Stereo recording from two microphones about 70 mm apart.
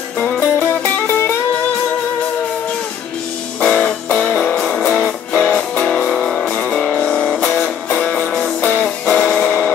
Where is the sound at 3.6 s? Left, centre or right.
Centre.